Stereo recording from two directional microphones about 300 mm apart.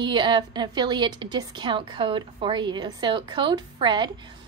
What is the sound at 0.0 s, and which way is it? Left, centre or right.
A woman's voice, centre.